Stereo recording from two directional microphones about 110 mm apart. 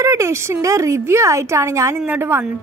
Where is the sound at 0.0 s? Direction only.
25° right (ahead or behind).